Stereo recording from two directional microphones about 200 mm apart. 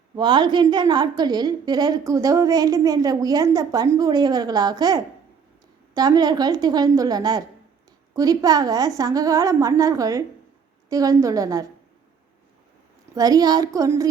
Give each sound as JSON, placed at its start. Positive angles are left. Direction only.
{"t": 0.2, "sound": "a woman's voice", "side_deg": -20}
{"t": 13.1, "sound": "a woman's voice", "side_deg": -20}